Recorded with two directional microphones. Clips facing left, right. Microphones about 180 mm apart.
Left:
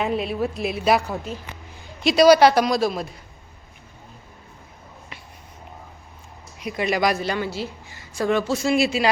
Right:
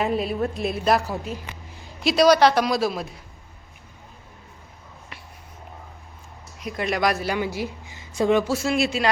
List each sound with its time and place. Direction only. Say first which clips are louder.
0.0 s a woman's voice: even; centre (ahead or behind)
6.6 s a woman's voice: left 2 dB; centre (ahead or behind)
7.3 s a woman's voice: right 1 dB; 15° right (ahead or behind)
8.5 s a woman's voice: left 2 dB; centre (ahead or behind)